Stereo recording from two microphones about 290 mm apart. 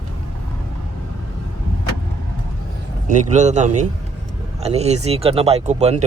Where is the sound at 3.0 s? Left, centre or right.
Right.